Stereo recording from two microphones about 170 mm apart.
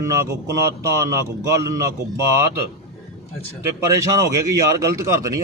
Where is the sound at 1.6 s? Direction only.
20° right (ahead or behind).